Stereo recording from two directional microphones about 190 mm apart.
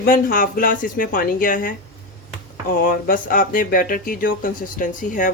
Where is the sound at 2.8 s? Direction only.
45° left (ahead or behind).